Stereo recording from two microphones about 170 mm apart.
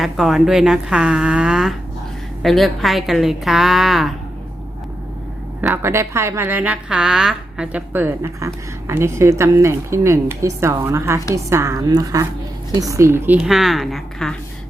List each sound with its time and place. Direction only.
0.0 s a woman's voice: centre (ahead or behind)
5.6 s a woman's voice: 15° right (ahead or behind)